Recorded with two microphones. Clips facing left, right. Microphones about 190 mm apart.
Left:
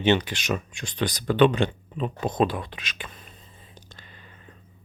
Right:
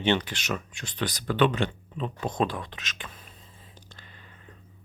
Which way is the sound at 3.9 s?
15° left (ahead or behind).